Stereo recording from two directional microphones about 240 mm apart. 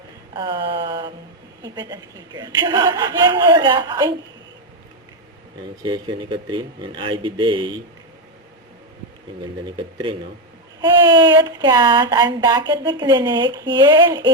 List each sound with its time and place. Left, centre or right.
0.3 s speech: centre
5.8 s speech: centre
9.6 s speech: centre